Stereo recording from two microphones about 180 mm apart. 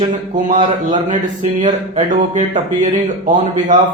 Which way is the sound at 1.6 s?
45° right (ahead or behind).